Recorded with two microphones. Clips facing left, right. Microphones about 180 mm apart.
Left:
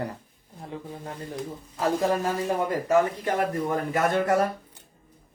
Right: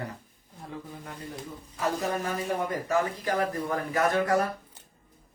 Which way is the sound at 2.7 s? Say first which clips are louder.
Left 5 dB; 25° left (ahead or behind).